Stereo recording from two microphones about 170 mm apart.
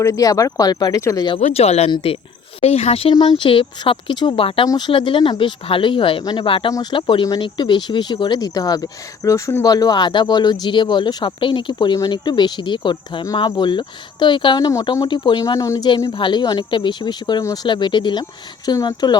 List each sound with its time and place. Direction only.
0.0 s speech: 20° left (ahead or behind)
1.4 s speech: 40° left (ahead or behind); by 19.1 s 25° left (ahead or behind)